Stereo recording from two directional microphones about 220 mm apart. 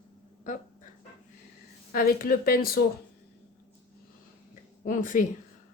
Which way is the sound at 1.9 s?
40° left (ahead or behind).